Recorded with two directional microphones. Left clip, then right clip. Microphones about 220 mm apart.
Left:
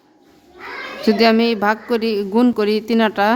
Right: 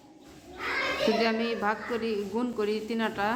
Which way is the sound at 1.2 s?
50° left (ahead or behind).